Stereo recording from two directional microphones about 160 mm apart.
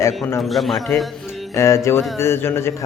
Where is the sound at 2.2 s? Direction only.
15° left (ahead or behind).